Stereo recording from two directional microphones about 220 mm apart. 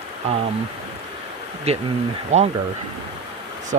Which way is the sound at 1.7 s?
30° right (ahead or behind).